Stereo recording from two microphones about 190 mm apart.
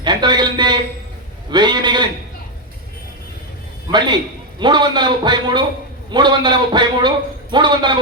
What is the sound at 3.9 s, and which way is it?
A man's voice, 20° right (ahead or behind).